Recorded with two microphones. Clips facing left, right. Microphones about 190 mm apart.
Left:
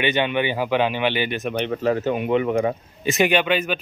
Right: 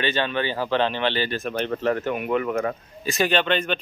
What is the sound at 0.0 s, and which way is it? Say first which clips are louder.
Speech: left 3 dB; 15° left (ahead or behind).